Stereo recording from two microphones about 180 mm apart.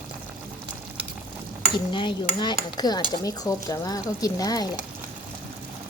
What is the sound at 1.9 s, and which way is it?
Speech, 25° left (ahead or behind).